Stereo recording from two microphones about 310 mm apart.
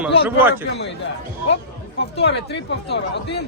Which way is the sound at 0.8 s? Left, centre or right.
Left.